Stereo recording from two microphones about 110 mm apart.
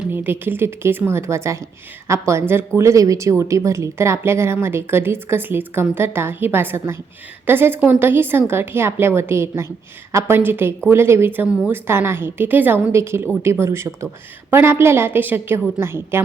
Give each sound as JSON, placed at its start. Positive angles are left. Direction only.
{"t": 0.1, "sound": "speech", "side_deg": -20}